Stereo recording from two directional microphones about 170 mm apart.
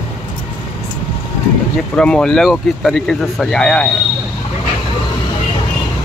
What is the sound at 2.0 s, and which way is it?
Speech, 5° left (ahead or behind).